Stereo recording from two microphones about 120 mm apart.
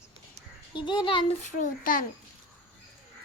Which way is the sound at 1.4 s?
90° left.